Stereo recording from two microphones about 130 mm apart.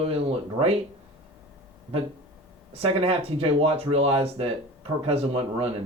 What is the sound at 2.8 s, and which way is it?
Speech, 50° right (ahead or behind).